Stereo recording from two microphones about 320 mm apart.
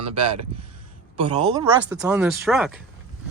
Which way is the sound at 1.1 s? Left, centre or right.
Centre.